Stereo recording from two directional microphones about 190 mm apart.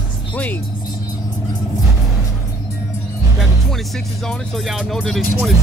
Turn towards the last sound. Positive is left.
turn(degrees=0)  # may be behind; listen again after turning